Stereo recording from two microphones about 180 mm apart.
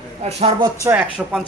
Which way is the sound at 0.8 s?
5° right (ahead or behind).